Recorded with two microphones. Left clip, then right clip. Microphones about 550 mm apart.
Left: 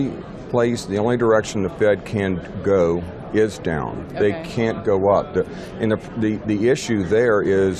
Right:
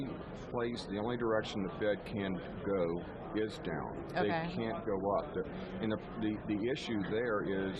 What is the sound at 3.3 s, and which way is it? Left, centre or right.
Speech, left.